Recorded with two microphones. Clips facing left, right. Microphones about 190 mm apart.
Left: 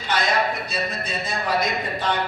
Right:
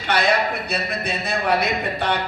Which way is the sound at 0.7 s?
65° right (ahead or behind).